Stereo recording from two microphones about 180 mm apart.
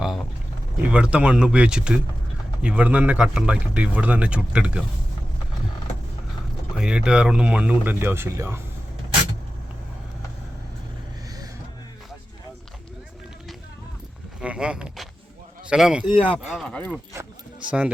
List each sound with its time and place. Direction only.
0.8 s speech: 5° right (ahead or behind)
6.7 s speech: 5° right (ahead or behind)
14.4 s a sound: 5° right (ahead or behind)
15.7 s speech: 5° right (ahead or behind)
17.7 s speech: 5° right (ahead or behind)